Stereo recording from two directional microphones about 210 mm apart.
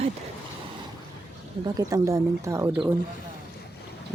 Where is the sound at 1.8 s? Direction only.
15° right (ahead or behind).